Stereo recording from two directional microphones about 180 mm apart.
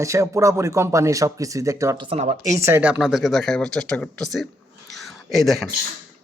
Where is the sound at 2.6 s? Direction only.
10° right (ahead or behind).